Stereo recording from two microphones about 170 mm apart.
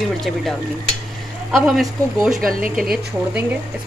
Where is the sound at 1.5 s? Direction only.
Centre (ahead or behind).